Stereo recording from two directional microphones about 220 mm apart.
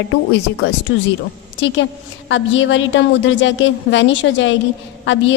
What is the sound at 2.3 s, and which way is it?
A woman's voice, 55° left (ahead or behind).